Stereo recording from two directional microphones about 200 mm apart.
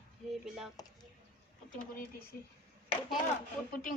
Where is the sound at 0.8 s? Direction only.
20° left (ahead or behind).